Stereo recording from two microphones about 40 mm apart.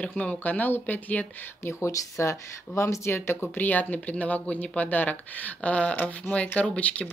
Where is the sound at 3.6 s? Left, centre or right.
Left.